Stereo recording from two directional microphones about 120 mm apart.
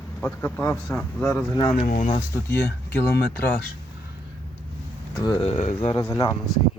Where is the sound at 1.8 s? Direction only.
90° left.